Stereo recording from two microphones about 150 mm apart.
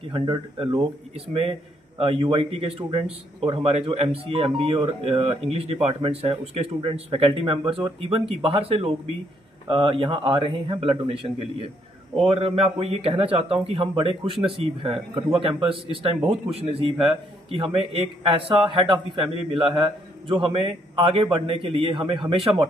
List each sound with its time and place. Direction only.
0.0 s speech: 30° right (ahead or behind)